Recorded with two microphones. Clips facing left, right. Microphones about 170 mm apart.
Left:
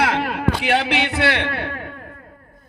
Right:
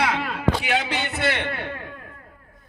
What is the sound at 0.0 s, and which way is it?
A man's voice, 55° left (ahead or behind).